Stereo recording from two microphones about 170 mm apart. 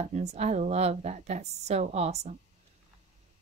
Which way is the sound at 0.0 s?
40° right (ahead or behind).